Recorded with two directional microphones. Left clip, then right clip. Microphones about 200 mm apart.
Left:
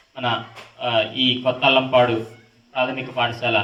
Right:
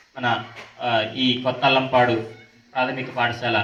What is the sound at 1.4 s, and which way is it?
A man's voice, 20° left (ahead or behind).